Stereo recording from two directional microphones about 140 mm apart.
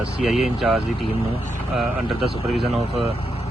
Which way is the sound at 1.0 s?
40° left (ahead or behind).